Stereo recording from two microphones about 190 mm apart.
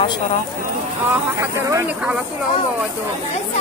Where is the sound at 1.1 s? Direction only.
15° right (ahead or behind).